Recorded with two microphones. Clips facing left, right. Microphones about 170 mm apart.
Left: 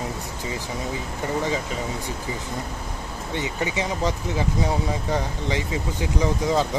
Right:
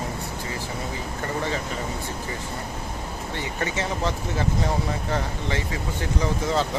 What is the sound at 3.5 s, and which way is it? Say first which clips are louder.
Speech: even; 15° left (ahead or behind).